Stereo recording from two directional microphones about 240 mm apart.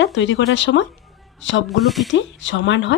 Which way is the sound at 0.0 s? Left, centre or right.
Left.